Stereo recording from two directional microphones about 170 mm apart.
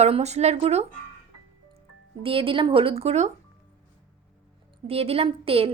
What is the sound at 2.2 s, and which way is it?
A woman's voice, 30° right (ahead or behind).